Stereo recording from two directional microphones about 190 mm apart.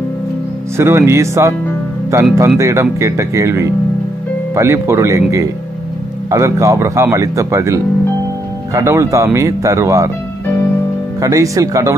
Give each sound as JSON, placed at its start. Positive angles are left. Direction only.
{"t": 0.7, "sound": "speech", "side_deg": -15}
{"t": 11.1, "sound": "speech", "side_deg": -15}